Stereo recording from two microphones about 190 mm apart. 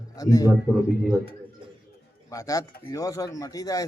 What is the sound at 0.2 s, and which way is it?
Speech, 20° left (ahead or behind).